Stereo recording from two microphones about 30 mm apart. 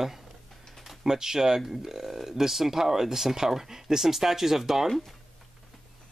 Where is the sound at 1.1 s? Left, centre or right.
Centre.